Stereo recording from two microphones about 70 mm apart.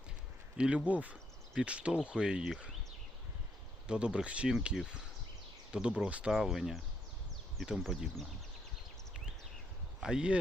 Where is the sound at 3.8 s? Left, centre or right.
Centre.